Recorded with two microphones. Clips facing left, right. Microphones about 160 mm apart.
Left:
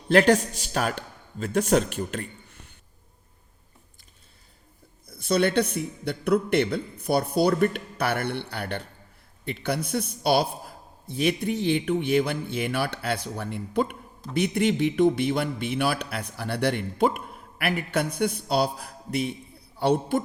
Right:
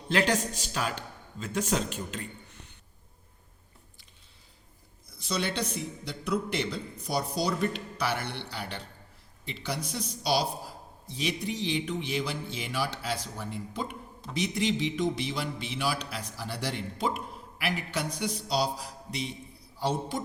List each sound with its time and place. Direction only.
0.1 s speech: 50° left (ahead or behind)
5.0 s a man's voice: 55° left (ahead or behind)